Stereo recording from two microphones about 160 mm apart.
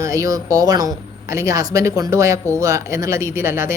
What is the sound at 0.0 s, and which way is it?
Speech, 20° right (ahead or behind).